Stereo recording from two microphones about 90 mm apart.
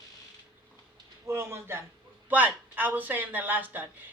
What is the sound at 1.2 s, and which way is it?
Speech, 30° right (ahead or behind).